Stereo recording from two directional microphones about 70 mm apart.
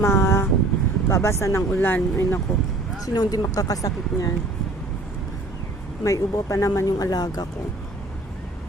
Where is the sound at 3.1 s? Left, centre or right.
Left.